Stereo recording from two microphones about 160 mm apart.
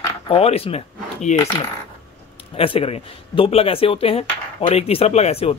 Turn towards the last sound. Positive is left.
turn(degrees=40)  # may be behind; listen again after turning